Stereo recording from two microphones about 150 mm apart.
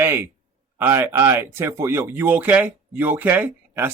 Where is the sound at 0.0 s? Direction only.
15° right (ahead or behind).